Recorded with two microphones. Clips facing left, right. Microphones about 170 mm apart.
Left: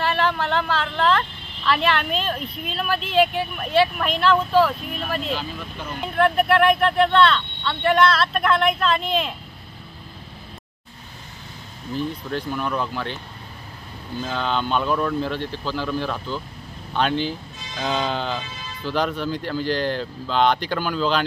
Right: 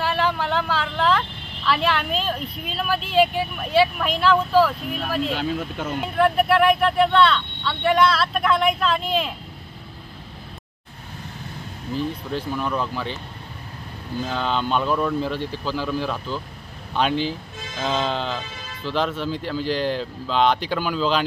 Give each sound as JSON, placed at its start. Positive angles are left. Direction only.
{"t": 0.0, "sound": "vehicle", "side_deg": -5}
{"t": 1.7, "sound": "speech", "side_deg": -5}
{"t": 5.3, "sound": "speech", "side_deg": -70}
{"t": 6.1, "sound": "speech", "side_deg": -5}
{"t": 12.3, "sound": "speech", "side_deg": 0}
{"t": 14.2, "sound": "speech", "side_deg": 0}